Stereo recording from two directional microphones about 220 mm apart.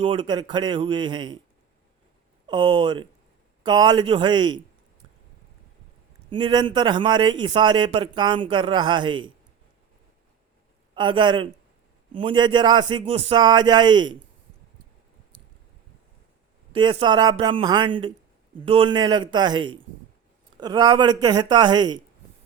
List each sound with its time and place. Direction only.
0.0 s speech: 25° right (ahead or behind)
2.5 s speech: 20° right (ahead or behind)
6.3 s speech: 20° right (ahead or behind)
10.9 s speech: 20° right (ahead or behind)
16.7 s speech: 20° right (ahead or behind)